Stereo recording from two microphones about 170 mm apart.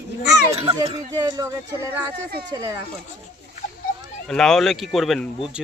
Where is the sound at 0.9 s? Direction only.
25° right (ahead or behind).